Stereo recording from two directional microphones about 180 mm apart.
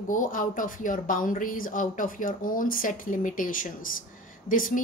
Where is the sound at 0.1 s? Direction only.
45° left (ahead or behind).